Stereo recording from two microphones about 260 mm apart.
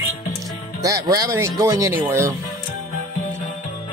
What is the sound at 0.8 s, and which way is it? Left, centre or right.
Speech, centre.